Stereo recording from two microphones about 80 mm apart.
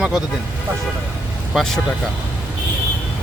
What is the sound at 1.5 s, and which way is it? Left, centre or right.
Speech, centre.